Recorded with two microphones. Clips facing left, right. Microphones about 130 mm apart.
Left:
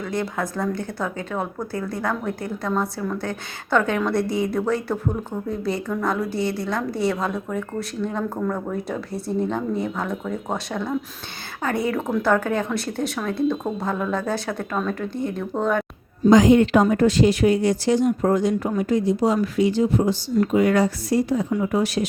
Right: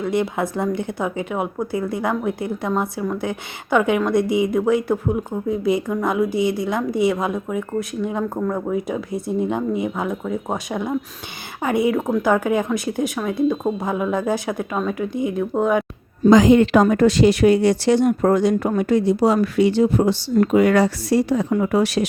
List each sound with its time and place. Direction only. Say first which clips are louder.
0.0 s a woman's voice: right 5 dB; 20° right (ahead or behind)
16.2 s speech: right 2 dB; 90° right